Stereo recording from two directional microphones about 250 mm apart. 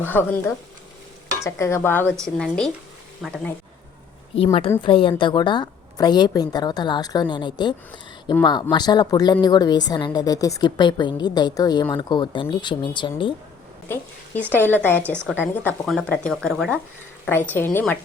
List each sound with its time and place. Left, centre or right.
0.0 s a woman's voice: centre
4.8 s a woman's voice: left
13.8 s a woman's voice: centre
15.1 s a woman's voice: centre
15.4 s a woman's voice: centre